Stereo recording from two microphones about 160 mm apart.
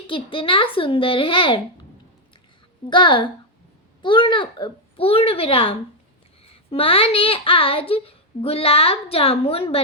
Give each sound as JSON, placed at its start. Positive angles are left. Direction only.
{"t": 0.1, "sound": "a child's voice", "side_deg": 35}
{"t": 2.9, "sound": "a woman's voice", "side_deg": 30}